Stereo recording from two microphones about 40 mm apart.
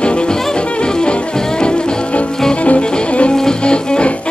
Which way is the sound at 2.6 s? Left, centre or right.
Left.